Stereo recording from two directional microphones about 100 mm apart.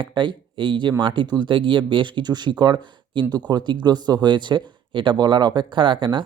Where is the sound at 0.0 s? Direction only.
50° right (ahead or behind).